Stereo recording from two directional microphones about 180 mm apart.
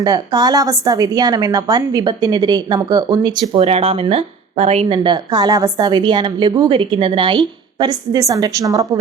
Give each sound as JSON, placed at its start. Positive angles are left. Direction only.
{"t": 0.0, "sound": "a woman's voice", "side_deg": -20}
{"t": 3.6, "sound": "a woman's voice", "side_deg": -35}